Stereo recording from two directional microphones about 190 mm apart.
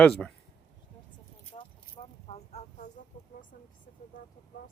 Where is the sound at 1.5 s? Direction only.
30° left (ahead or behind).